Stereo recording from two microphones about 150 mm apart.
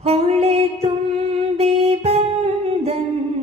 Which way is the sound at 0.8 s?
45° right (ahead or behind).